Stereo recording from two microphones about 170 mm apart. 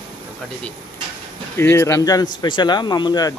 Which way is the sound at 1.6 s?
15° left (ahead or behind).